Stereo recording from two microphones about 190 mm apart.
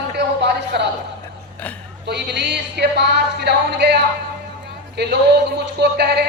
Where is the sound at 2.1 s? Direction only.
60° right (ahead or behind).